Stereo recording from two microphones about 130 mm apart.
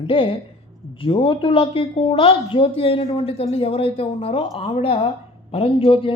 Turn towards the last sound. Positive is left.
turn(degrees=45)  # may be behind; listen again after turning